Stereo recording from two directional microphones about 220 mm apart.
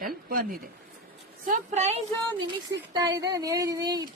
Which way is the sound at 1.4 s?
30° right (ahead or behind).